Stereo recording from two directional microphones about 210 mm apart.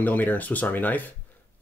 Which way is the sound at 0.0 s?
10° left (ahead or behind).